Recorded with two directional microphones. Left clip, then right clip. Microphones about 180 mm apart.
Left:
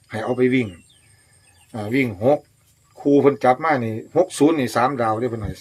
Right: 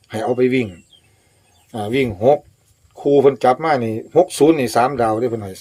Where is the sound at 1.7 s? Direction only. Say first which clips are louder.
Right 3 dB; 40° right (ahead or behind).